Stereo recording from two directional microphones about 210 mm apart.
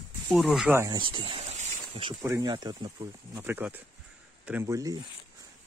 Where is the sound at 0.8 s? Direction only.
25° right (ahead or behind).